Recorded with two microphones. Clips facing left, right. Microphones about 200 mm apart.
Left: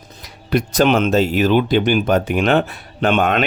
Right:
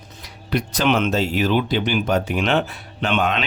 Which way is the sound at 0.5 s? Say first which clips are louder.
Left 5 dB; 45° left (ahead or behind).